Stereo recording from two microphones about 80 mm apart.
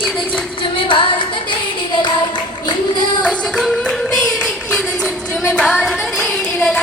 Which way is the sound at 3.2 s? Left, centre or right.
Centre.